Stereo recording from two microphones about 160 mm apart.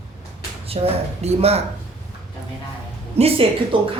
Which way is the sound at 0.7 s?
35° right (ahead or behind).